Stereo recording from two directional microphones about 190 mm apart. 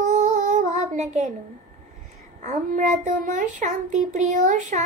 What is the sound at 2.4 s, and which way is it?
A child's voice, 35° right (ahead or behind).